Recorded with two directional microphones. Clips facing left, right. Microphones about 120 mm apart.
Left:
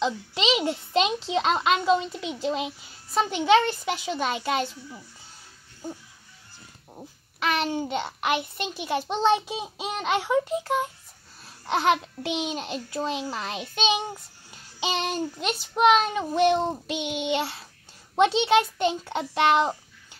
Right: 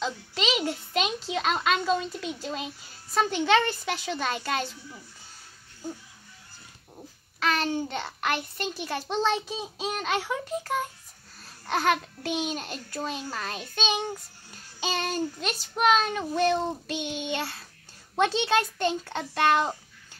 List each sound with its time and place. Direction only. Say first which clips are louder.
0.0 s a sound: left 4 dB; 25° left (ahead or behind)
0.7 s a child's voice: left 4 dB; 25° left (ahead or behind)
7.0 s a child's voice: left 1 dB; 20° left (ahead or behind)
17.0 s child singing: left 3 dB; 70° left (ahead or behind)
17.3 s a child's voice: left 5 dB; 15° left (ahead or behind)